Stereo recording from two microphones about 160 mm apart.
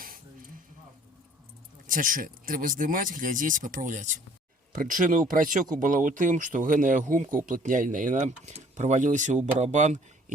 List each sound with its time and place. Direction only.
1.9 s speech: 60° right (ahead or behind)